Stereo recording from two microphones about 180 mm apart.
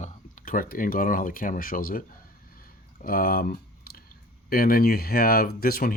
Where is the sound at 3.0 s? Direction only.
55° left (ahead or behind).